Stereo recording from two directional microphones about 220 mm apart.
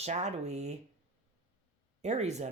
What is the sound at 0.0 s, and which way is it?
Speech, 30° right (ahead or behind).